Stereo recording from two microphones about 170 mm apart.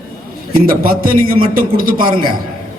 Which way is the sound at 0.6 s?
60° right (ahead or behind).